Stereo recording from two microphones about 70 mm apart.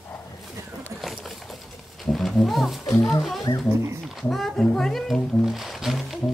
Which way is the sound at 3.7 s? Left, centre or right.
Right.